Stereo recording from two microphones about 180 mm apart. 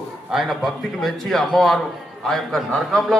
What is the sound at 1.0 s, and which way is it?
A man's voice, centre (ahead or behind).